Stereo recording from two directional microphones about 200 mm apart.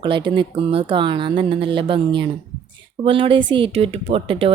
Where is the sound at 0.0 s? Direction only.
25° right (ahead or behind).